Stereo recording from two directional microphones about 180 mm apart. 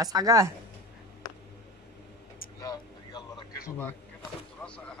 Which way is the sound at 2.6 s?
20° left (ahead or behind).